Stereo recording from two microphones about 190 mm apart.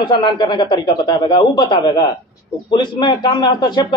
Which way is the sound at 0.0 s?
25° left (ahead or behind).